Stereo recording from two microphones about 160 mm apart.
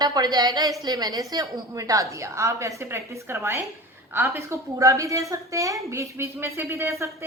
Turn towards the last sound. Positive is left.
turn(degrees=-20)  # may be behind; listen again after turning